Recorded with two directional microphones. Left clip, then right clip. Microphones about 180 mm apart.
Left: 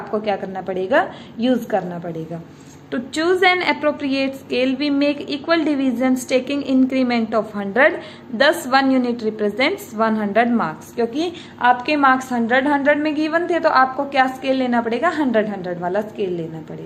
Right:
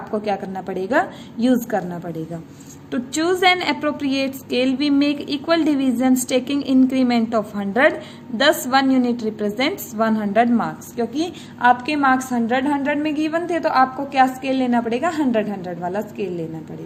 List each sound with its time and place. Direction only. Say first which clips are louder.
0.1 s a woman's voice: left 1 dB; 30° right (ahead or behind)